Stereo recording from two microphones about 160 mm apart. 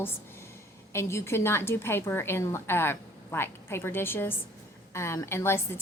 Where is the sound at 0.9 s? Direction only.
15° left (ahead or behind).